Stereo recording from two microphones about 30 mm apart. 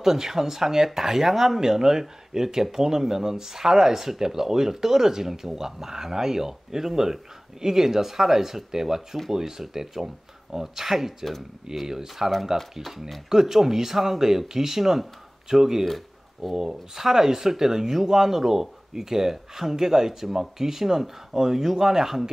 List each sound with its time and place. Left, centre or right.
0.0 s speech: centre